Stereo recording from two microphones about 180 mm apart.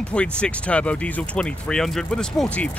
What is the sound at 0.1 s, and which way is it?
Speech, 5° left (ahead or behind).